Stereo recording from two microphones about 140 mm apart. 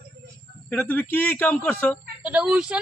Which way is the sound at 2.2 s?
10° right (ahead or behind).